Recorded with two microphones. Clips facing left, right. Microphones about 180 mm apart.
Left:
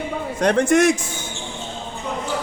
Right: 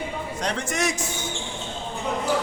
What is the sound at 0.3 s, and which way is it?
Speech, 55° left (ahead or behind).